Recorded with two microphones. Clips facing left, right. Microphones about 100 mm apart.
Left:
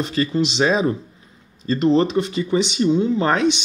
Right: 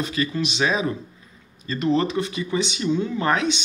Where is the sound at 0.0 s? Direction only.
30° left (ahead or behind).